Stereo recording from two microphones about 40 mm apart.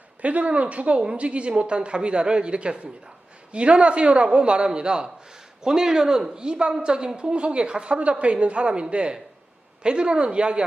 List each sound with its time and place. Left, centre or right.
0.2 s speech: right